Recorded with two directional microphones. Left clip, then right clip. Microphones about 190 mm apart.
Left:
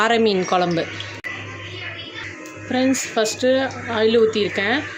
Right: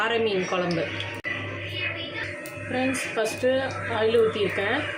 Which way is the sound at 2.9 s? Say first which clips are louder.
Left 6 dB; 60° left (ahead or behind).